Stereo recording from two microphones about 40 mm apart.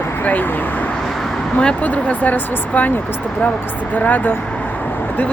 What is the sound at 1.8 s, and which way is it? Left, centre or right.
Speech, left.